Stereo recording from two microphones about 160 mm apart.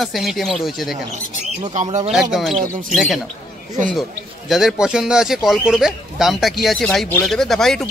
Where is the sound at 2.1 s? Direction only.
5° right (ahead or behind).